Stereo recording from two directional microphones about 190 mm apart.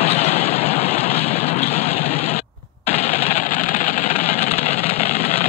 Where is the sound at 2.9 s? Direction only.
35° left (ahead or behind).